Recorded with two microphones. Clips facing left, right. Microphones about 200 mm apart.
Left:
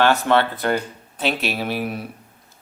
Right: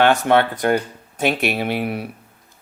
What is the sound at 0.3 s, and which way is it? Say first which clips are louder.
Speech: right 2 dB; 50° right (ahead or behind).